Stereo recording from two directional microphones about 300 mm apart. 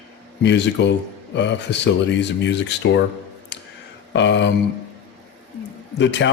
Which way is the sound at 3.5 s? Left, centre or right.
Left.